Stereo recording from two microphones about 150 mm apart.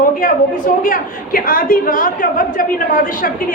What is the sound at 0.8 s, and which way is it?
A woman's voice, 70° left (ahead or behind).